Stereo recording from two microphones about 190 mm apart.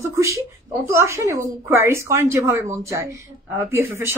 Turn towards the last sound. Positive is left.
turn(degrees=-15)  # may be behind; listen again after turning